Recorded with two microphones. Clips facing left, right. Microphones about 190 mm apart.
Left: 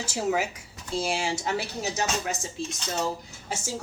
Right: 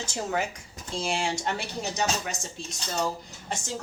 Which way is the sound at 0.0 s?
5° left (ahead or behind).